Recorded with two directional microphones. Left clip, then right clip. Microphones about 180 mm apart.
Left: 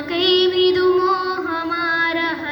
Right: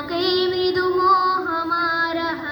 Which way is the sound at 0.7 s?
15° left (ahead or behind).